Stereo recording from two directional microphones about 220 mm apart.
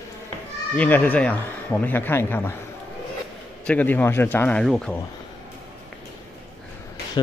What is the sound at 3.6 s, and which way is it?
A man's voice, 5° left (ahead or behind).